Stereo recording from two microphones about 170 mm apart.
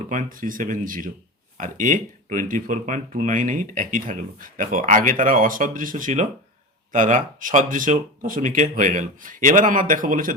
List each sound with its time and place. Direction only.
0.1 s speech: 50° right (ahead or behind)